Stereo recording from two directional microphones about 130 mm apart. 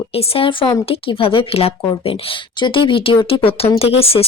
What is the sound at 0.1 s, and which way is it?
Speech, 45° left (ahead or behind).